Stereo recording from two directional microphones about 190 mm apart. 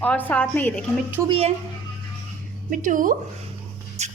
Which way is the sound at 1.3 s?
30° right (ahead or behind).